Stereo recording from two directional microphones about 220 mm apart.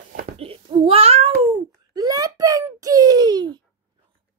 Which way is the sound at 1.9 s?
15° right (ahead or behind).